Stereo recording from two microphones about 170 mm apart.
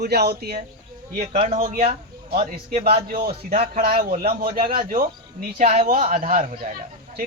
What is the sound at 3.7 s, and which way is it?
Speech, 60° right (ahead or behind).